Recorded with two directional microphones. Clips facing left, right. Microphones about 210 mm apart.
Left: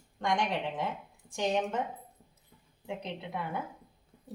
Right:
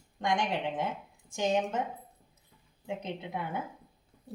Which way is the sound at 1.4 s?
20° right (ahead or behind).